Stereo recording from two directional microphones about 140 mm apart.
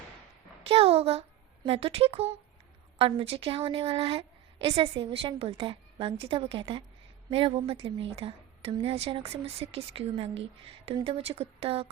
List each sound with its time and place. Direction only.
0.7 s a child's voice: 45° right (ahead or behind)